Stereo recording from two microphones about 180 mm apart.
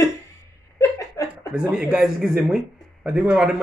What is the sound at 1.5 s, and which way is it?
Speech, 5° right (ahead or behind).